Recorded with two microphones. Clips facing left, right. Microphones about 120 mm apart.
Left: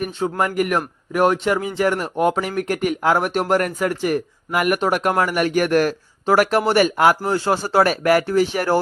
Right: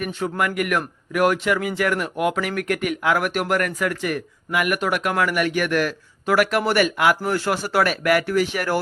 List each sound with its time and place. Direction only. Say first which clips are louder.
0.0 s speech: left 2 dB; 30° left (ahead or behind)
7.3 s speech: left 3 dB; 25° left (ahead or behind)